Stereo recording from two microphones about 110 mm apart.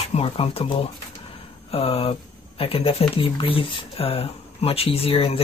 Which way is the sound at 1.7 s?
60° left (ahead or behind).